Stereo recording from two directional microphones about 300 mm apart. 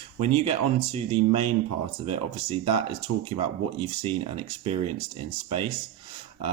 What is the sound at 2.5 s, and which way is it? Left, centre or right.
Speech, centre.